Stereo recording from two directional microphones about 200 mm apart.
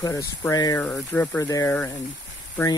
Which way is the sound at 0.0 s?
15° left (ahead or behind).